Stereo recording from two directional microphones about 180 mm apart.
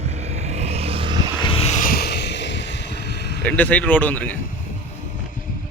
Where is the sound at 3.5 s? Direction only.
10° left (ahead or behind).